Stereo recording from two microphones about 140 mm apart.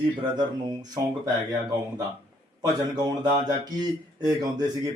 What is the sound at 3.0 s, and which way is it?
Speech, 30° right (ahead or behind).